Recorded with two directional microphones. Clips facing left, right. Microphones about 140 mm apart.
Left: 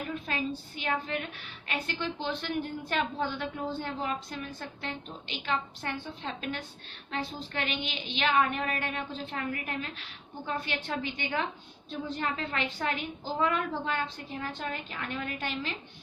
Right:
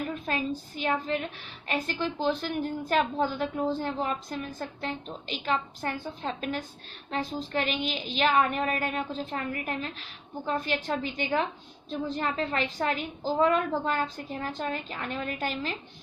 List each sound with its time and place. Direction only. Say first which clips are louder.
0.3 s a woman's voice: right 3 dB; 35° right (ahead or behind)